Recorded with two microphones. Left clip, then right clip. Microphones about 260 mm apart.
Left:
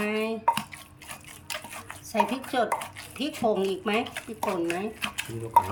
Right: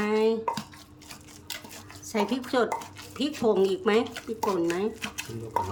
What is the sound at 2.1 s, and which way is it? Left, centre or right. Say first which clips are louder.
Speech: left 1 dB; centre.